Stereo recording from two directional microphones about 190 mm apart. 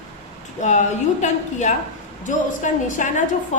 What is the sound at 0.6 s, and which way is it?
A woman's voice, 40° left (ahead or behind).